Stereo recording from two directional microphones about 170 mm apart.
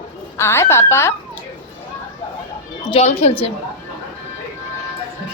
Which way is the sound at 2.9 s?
40° left (ahead or behind).